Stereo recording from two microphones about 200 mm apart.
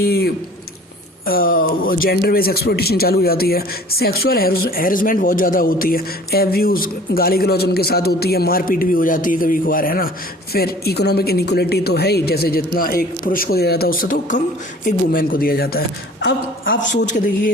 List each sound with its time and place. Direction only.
0.0 s speech: 50° left (ahead or behind)
17.1 s a man's voice: 40° left (ahead or behind)